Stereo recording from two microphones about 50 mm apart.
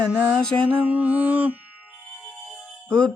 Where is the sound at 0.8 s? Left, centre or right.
Right.